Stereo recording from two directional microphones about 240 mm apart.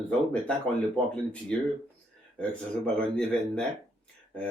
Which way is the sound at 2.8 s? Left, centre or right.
Centre.